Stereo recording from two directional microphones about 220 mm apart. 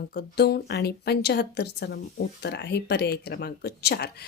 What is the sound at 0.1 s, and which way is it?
A woman's voice, 50° left (ahead or behind).